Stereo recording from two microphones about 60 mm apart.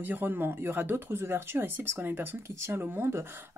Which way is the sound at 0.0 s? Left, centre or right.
Right.